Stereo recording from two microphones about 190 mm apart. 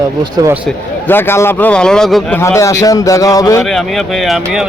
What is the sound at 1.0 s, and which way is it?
A man's voice, 10° left (ahead or behind).